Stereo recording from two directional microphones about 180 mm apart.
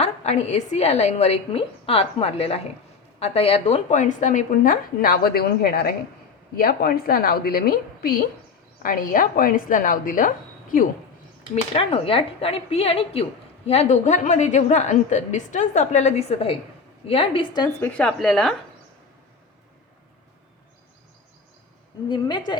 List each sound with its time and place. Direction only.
0.0 s a woman's voice: 35° left (ahead or behind); by 7.6 s 55° left (ahead or behind)
8.8 s a woman's voice: 50° left (ahead or behind)
11.5 s a woman's voice: 35° left (ahead or behind)
17.7 s a woman's voice: 10° left (ahead or behind)
22.1 s a woman's voice: 25° left (ahead or behind)